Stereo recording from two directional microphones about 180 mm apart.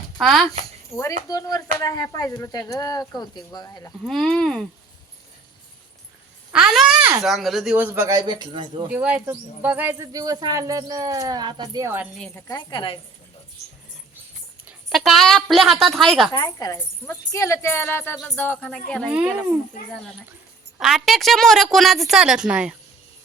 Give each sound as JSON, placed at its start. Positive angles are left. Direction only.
{"t": 0.2, "sound": "a woman's voice", "side_deg": 0}
{"t": 0.9, "sound": "speech", "side_deg": 20}
{"t": 4.0, "sound": "a woman's voice", "side_deg": 0}
{"t": 6.5, "sound": "speech", "side_deg": -5}
{"t": 8.9, "sound": "speech", "side_deg": -5}
{"t": 12.5, "sound": "speech", "side_deg": 25}
{"t": 14.7, "sound": "a woman's voice", "side_deg": 0}
{"t": 16.3, "sound": "a woman's voice", "side_deg": 20}
{"t": 19.0, "sound": "speech", "side_deg": -10}
{"t": 20.7, "sound": "a woman's voice", "side_deg": 0}